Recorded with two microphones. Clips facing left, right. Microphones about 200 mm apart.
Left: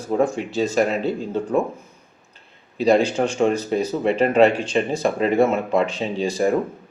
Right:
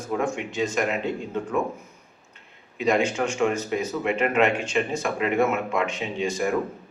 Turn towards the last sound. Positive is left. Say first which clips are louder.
# left 5 dB
turn(degrees=35)  # may be behind; listen again after turning